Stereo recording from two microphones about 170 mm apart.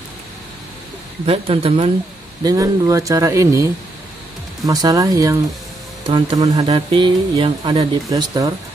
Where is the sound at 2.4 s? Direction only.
20° right (ahead or behind).